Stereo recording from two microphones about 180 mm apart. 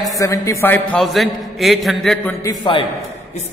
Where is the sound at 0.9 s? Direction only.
Centre (ahead or behind).